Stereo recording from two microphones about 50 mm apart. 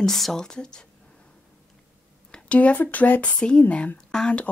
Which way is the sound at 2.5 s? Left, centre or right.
Left.